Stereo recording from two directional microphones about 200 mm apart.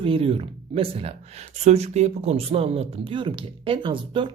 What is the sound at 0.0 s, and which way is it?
Speech, 30° right (ahead or behind).